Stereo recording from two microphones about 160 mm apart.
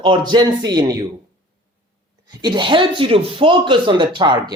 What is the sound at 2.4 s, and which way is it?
Speech, 30° right (ahead or behind).